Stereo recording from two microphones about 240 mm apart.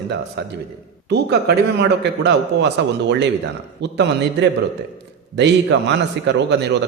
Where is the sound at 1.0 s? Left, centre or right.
Right.